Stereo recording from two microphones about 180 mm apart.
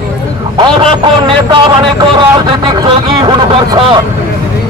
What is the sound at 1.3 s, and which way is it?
Speech, 30° right (ahead or behind).